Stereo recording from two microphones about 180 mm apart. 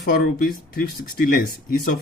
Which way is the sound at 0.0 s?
50° left (ahead or behind).